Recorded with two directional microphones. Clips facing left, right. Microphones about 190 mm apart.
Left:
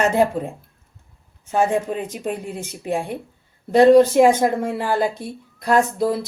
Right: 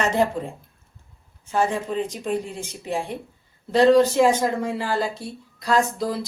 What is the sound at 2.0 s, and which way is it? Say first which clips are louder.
Speech: left 3 dB; 10° left (ahead or behind).